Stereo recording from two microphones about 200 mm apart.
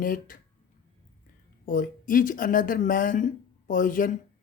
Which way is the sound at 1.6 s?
45° left (ahead or behind).